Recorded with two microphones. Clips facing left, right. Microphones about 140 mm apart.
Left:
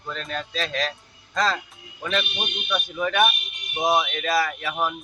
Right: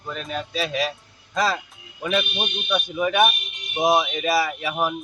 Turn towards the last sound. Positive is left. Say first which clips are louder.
# right 2 dB
turn(degrees=-10)  # may be behind; listen again after turning